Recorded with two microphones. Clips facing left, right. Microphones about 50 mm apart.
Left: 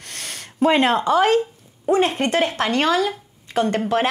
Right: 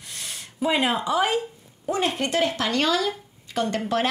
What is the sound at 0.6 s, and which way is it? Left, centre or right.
Speech, left.